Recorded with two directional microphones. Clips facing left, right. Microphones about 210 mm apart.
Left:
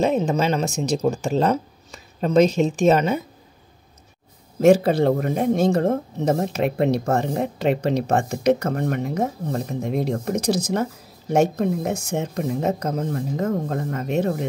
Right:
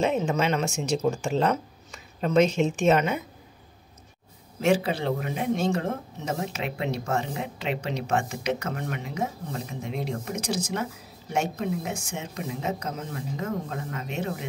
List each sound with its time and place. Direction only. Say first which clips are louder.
0.0 s speech: left 4 dB; 35° left (ahead or behind)
4.6 s speech: left 9 dB; 45° left (ahead or behind)